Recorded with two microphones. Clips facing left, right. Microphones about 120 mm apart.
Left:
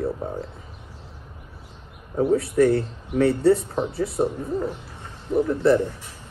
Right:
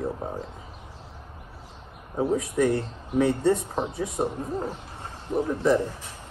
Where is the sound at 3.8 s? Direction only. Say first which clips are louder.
Left 4 dB; 5° left (ahead or behind).